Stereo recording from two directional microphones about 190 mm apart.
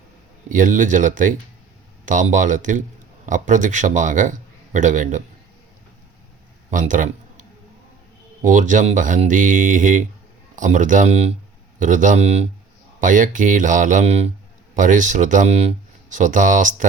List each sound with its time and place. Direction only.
0.4 s speech: 45° right (ahead or behind)
6.7 s a man's voice: 45° right (ahead or behind)
8.4 s speech: 40° right (ahead or behind)